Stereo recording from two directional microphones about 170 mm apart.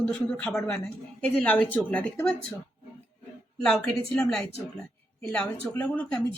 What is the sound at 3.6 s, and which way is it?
Speech, 5° left (ahead or behind).